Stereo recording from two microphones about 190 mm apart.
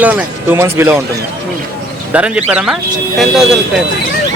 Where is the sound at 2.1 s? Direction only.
5° right (ahead or behind).